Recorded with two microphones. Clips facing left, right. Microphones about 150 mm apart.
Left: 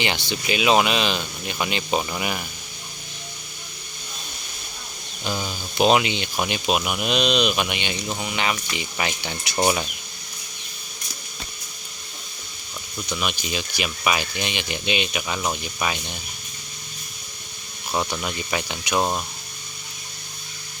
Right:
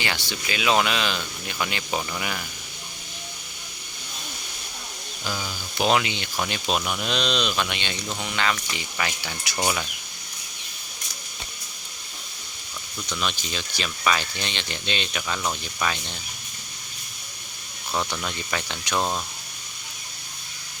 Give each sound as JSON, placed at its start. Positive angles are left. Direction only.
{"t": 0.0, "sound": "speech", "side_deg": 20}
{"t": 5.2, "sound": "speech", "side_deg": 20}
{"t": 13.1, "sound": "speech", "side_deg": 15}
{"t": 17.9, "sound": "speech", "side_deg": 15}